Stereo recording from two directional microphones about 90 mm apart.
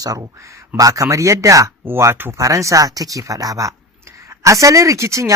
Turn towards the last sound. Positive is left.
turn(degrees=-35)  # may be behind; listen again after turning